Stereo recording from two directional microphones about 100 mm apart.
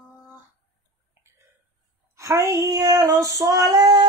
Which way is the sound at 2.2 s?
30° right (ahead or behind).